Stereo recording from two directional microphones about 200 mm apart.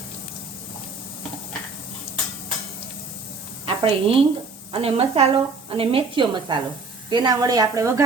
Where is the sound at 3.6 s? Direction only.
30° right (ahead or behind).